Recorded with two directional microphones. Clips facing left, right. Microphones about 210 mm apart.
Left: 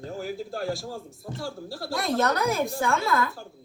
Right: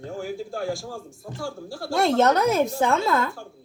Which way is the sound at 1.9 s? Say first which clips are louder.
Right 6 dB; 25° right (ahead or behind).